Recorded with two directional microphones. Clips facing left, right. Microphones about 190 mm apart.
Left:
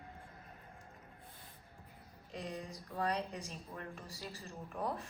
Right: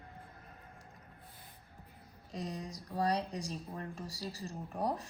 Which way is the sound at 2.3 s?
40° right (ahead or behind).